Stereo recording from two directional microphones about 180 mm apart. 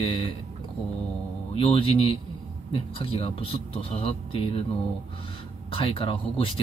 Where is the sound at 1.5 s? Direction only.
30° left (ahead or behind).